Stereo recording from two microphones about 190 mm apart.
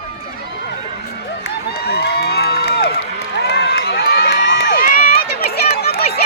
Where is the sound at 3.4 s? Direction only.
60° left (ahead or behind).